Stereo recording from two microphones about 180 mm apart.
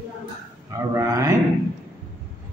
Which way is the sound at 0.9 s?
20° right (ahead or behind).